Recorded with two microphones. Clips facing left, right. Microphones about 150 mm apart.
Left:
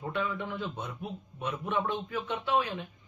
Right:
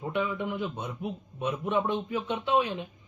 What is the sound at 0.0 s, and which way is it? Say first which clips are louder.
A man's voice: right 3 dB; 15° right (ahead or behind).